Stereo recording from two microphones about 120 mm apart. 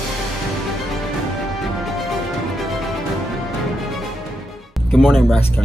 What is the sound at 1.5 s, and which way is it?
Music, centre (ahead or behind).